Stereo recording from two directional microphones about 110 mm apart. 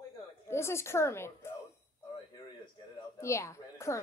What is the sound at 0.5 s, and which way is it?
A woman's voice, 25° left (ahead or behind).